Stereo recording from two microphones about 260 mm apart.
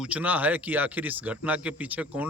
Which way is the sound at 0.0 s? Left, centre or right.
Centre.